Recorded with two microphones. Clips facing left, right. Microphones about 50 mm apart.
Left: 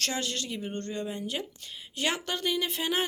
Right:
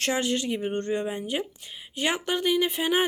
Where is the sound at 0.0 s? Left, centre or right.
Right.